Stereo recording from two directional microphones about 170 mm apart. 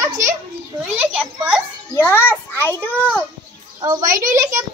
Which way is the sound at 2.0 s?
10° left (ahead or behind).